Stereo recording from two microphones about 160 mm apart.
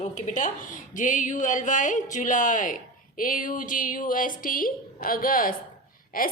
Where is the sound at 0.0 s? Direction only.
50° left (ahead or behind).